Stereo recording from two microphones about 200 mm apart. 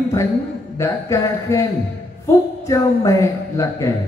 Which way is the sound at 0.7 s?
15° left (ahead or behind).